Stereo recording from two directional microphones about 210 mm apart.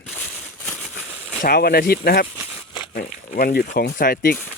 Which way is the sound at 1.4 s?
45° left (ahead or behind).